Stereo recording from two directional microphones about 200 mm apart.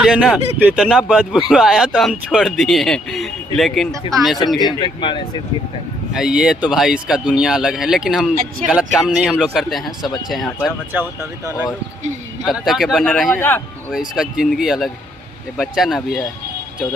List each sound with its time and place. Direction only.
0.0 s speech: 5° right (ahead or behind)
4.6 s speech: 20° left (ahead or behind)
6.1 s speech: 5° right (ahead or behind)
11.2 s speech: 10° right (ahead or behind)